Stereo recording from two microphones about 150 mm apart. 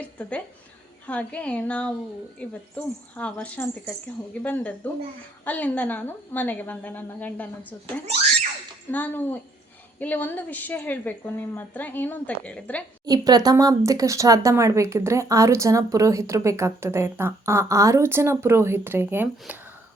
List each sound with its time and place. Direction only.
0.2 s a woman's voice: 10° left (ahead or behind)
13.1 s speech: 25° right (ahead or behind)